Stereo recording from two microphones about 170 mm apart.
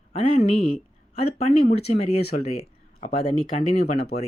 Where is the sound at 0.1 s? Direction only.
35° left (ahead or behind).